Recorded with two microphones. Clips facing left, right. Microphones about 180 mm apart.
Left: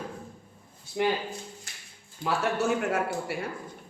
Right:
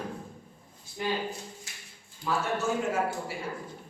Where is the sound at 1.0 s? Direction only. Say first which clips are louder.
Left 6 dB; 70° left (ahead or behind).